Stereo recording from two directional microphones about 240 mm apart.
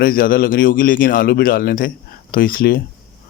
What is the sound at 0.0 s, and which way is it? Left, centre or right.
Speech, left.